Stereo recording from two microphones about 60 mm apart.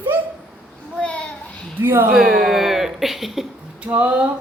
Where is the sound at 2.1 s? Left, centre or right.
Centre.